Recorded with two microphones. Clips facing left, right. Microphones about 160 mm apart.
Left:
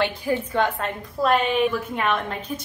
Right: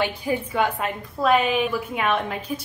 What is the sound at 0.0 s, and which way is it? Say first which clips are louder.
A woman's voice: left 1 dB; 10° right (ahead or behind).